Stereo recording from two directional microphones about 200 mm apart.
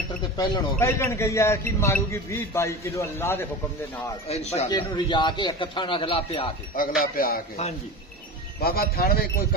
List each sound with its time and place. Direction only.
0.4 s a man's voice: 15° left (ahead or behind)
4.3 s a man's voice: 30° left (ahead or behind)
4.6 s a man's voice: 20° left (ahead or behind)
7.2 s speech: 45° left (ahead or behind)
8.5 s speech: 50° left (ahead or behind)